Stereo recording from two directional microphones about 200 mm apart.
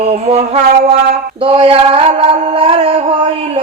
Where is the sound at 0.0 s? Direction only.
30° right (ahead or behind).